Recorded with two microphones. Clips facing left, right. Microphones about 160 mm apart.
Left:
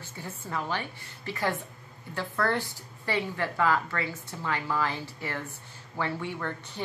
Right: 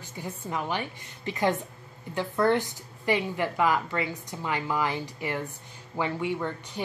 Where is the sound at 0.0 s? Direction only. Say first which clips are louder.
Right 3 dB; 15° right (ahead or behind).